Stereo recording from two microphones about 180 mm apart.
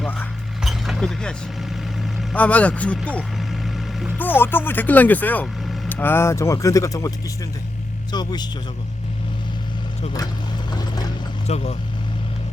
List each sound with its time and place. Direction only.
0.0 s cutlery: 10° left (ahead or behind)
0.6 s chink: centre (ahead or behind)
2.3 s speech: 10° left (ahead or behind)
4.2 s speech: 10° left (ahead or behind)
8.1 s a man's voice: 25° left (ahead or behind)
10.7 s mechanisms: 20° left (ahead or behind)
11.4 s speech: 35° left (ahead or behind)